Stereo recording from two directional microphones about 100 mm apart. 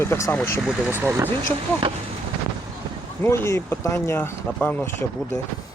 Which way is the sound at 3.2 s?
25° left (ahead or behind).